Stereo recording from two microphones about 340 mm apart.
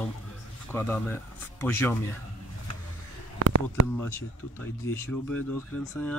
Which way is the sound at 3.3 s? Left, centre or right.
Right.